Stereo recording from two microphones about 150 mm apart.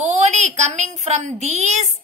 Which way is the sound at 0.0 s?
50° right (ahead or behind).